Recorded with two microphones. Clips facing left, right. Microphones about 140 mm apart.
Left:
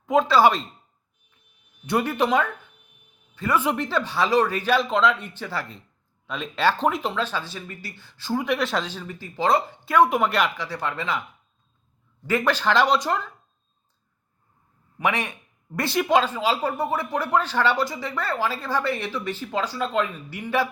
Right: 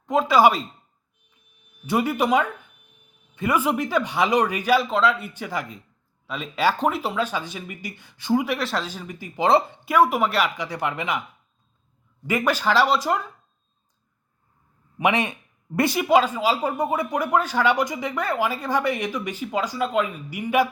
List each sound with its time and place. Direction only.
0.0 s a sound: centre (ahead or behind)
0.3 s speech: 15° right (ahead or behind)
1.9 s speech: 10° right (ahead or behind)
8.5 s speech: centre (ahead or behind)
8.9 s speech: 15° right (ahead or behind)
9.9 s speech: 5° right (ahead or behind)
10.6 s speech: 15° right (ahead or behind)
12.3 s speech: 10° right (ahead or behind)
14.9 s speech: 20° right (ahead or behind)
15.9 s speech: 10° right (ahead or behind)